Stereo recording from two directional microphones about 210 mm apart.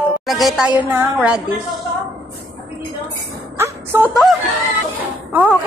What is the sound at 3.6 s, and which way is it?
Music, 10° right (ahead or behind).